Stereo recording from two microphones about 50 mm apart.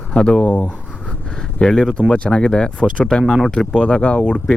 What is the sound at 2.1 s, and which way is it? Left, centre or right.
Speech, centre.